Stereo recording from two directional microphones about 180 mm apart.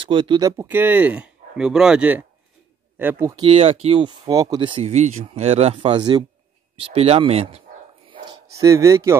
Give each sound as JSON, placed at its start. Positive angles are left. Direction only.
{"t": 0.0, "sound": "speech", "side_deg": -30}
{"t": 3.4, "sound": "speech", "side_deg": -35}
{"t": 8.1, "sound": "dog", "side_deg": -20}